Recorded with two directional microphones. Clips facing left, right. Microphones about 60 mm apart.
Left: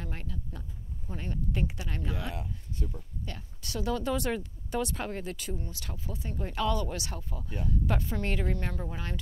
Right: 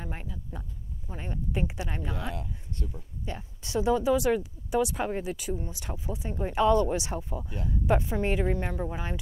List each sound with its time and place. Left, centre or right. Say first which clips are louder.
0.0 s speech: right 1 dB; centre
2.3 s speech: right 1 dB; centre
3.3 s speech: right 4 dB; right
4.0 s speech: right 6 dB; centre